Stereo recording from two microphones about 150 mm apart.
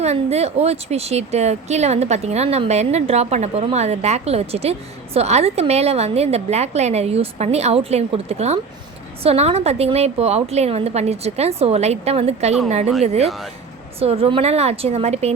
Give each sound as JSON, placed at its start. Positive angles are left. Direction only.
{"t": 0.0, "sound": "speech", "side_deg": -45}